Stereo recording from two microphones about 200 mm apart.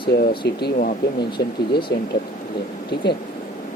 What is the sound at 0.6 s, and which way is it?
Speech, 50° left (ahead or behind).